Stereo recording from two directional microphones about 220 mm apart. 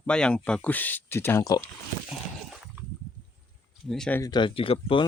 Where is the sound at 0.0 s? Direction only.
5° left (ahead or behind).